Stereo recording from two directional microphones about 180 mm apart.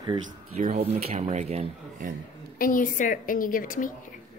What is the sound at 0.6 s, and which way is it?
Speech, 40° right (ahead or behind).